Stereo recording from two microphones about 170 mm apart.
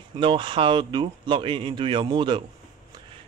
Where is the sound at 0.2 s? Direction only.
30° right (ahead or behind).